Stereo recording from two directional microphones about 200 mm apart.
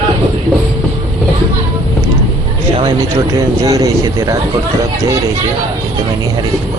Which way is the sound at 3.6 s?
15° right (ahead or behind).